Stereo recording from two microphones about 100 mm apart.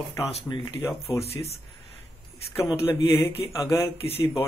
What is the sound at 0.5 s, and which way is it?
Speech, 50° left (ahead or behind).